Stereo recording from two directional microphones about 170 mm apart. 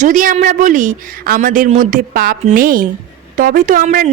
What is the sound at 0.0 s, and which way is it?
A woman's voice, 50° right (ahead or behind).